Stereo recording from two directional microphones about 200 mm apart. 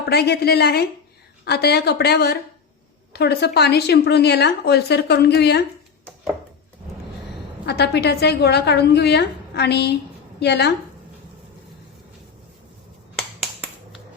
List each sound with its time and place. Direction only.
0.1 s a woman's voice: 55° left (ahead or behind)
7.6 s a woman's voice: 55° left (ahead or behind)